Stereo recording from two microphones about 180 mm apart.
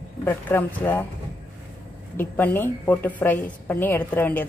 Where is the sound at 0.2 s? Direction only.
10° left (ahead or behind).